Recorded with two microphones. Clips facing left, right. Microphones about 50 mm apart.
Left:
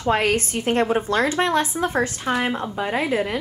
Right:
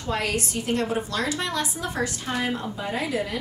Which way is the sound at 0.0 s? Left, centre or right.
Left.